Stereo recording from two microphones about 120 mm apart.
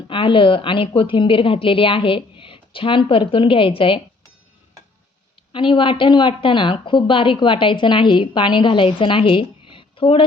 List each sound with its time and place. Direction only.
0.1 s a woman's voice: 45° left (ahead or behind)
5.5 s a woman's voice: 45° left (ahead or behind)